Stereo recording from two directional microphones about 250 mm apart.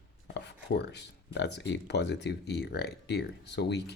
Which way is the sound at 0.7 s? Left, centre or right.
Left.